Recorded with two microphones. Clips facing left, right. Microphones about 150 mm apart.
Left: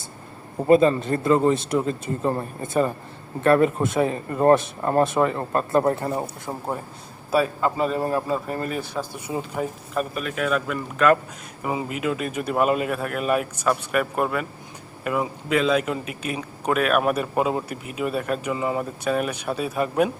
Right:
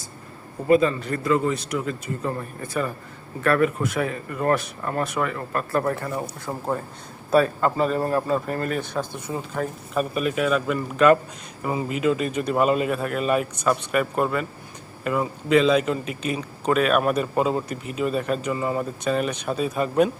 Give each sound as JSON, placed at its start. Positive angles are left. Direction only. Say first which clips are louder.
{"t": 0.7, "sound": "speech", "louder": "left 2 dB", "side_deg": 30}
{"t": 6.5, "sound": "a man's voice", "louder": "right 1 dB", "side_deg": 15}
{"t": 7.3, "sound": "a man's voice", "louder": "right 2 dB", "side_deg": 5}
{"t": 9.9, "sound": "speech", "louder": "right 6 dB", "side_deg": -5}
{"t": 11.6, "sound": "a man's voice", "louder": "right 3 dB", "side_deg": 10}